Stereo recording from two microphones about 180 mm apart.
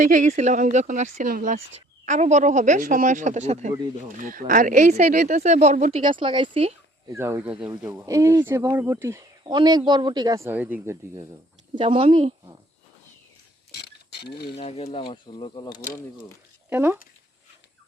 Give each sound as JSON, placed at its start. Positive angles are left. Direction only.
{"t": 0.0, "sound": "speech", "side_deg": -45}
{"t": 6.1, "sound": "speech", "side_deg": -30}
{"t": 7.1, "sound": "speech", "side_deg": -15}
{"t": 7.9, "sound": "speech", "side_deg": -15}
{"t": 9.4, "sound": "speech", "side_deg": -25}
{"t": 11.7, "sound": "speech", "side_deg": -30}
{"t": 13.7, "sound": "a sound", "side_deg": 65}
{"t": 14.6, "sound": "speech", "side_deg": 35}
{"t": 16.6, "sound": "speech", "side_deg": -10}